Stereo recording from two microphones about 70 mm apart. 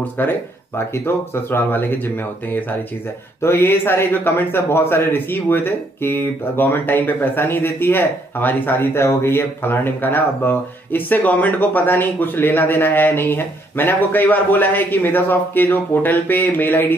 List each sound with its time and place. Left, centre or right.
0.0 s a man's voice: left